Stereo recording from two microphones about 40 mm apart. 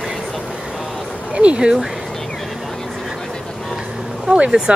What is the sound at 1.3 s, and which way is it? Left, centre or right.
Speech, right.